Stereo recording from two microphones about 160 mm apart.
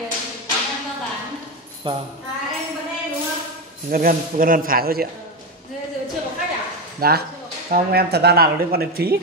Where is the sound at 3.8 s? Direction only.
65° right (ahead or behind).